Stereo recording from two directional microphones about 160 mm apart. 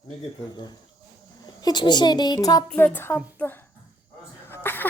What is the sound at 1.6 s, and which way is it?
A woman's voice, 25° left (ahead or behind).